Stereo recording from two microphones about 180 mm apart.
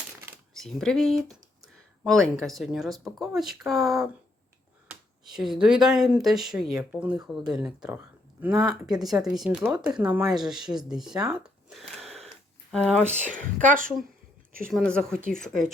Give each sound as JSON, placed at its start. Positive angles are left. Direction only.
{"t": 0.6, "sound": "speech", "side_deg": 5}
{"t": 8.5, "sound": "speech", "side_deg": -20}
{"t": 9.0, "sound": "speech", "side_deg": 0}
{"t": 13.0, "sound": "speech", "side_deg": -40}
{"t": 14.8, "sound": "speech", "side_deg": 5}